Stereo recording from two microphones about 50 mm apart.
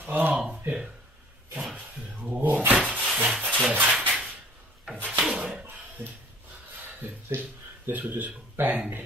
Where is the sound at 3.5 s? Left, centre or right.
Right.